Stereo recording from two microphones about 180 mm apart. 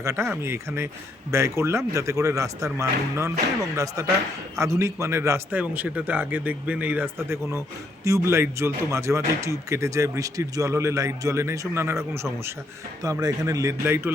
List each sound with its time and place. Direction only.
0.0 s speech: 15° right (ahead or behind)
4.5 s speech: 15° right (ahead or behind)